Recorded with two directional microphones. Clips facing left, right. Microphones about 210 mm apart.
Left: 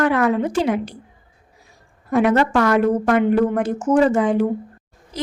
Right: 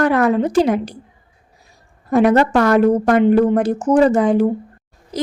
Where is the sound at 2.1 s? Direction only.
40° right (ahead or behind).